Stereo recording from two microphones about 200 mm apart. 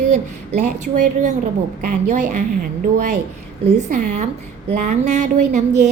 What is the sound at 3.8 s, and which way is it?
A woman's voice, 35° right (ahead or behind).